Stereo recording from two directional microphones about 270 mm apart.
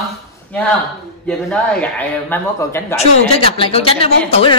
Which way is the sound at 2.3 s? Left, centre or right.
Centre.